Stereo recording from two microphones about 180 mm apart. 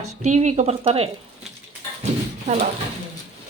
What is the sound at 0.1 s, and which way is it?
A woman's voice, 40° right (ahead or behind).